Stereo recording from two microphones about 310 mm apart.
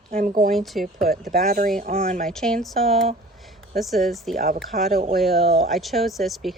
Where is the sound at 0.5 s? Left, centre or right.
Centre.